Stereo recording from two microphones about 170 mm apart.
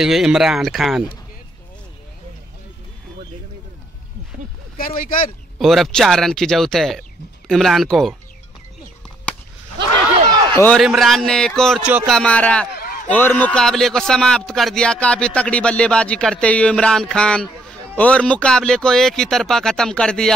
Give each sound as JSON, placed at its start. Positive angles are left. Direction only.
{"t": 0.0, "sound": "speech", "side_deg": -5}
{"t": 4.7, "sound": "speech", "side_deg": 55}
{"t": 5.6, "sound": "speech", "side_deg": 0}
{"t": 9.8, "sound": "a sound", "side_deg": -25}
{"t": 10.5, "sound": "a man's voice", "side_deg": 10}
{"t": 10.8, "sound": "speech", "side_deg": 0}
{"t": 12.7, "sound": "a sound", "side_deg": 55}
{"t": 13.1, "sound": "speech", "side_deg": 10}